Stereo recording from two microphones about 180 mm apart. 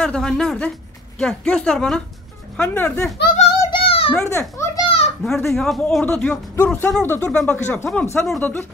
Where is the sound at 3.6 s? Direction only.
30° left (ahead or behind).